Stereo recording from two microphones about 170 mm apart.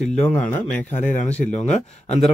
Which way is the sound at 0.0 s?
5° left (ahead or behind).